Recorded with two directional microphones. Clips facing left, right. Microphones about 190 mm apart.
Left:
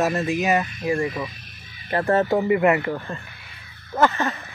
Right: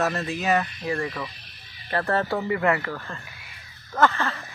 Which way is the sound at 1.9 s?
15° left (ahead or behind).